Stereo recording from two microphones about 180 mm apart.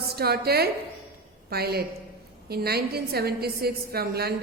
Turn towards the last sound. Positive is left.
turn(degrees=-60)  # may be behind; listen again after turning